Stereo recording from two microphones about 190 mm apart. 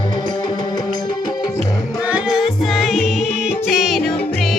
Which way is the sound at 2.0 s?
5° right (ahead or behind).